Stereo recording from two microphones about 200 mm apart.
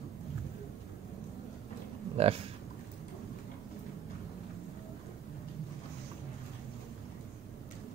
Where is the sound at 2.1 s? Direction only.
30° right (ahead or behind).